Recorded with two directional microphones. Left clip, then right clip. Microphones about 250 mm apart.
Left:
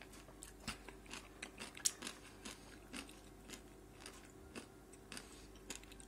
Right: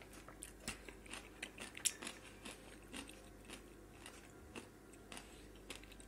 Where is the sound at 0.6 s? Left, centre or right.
Centre.